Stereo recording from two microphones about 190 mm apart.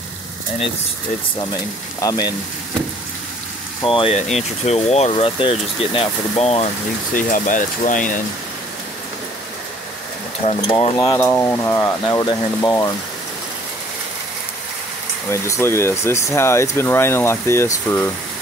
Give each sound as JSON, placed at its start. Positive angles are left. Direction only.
{"t": 2.0, "sound": "speech", "side_deg": 20}
{"t": 3.8, "sound": "speech", "side_deg": 30}
{"t": 7.2, "sound": "speech", "side_deg": 45}
{"t": 10.4, "sound": "speech", "side_deg": 30}
{"t": 11.0, "sound": "speech", "side_deg": 15}
{"t": 15.2, "sound": "speech", "side_deg": 15}